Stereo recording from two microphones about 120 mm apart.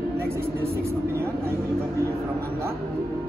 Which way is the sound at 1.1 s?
20° right (ahead or behind).